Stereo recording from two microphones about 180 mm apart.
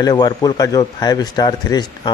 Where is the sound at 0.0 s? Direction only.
20° left (ahead or behind).